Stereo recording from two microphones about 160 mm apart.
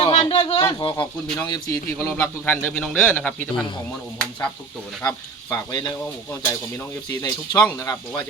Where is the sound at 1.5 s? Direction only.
25° left (ahead or behind).